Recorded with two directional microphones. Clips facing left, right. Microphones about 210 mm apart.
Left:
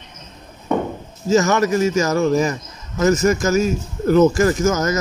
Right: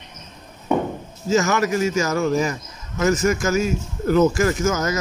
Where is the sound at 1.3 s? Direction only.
40° left (ahead or behind).